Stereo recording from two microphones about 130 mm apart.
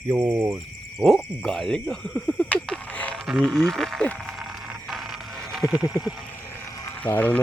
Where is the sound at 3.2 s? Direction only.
Centre (ahead or behind).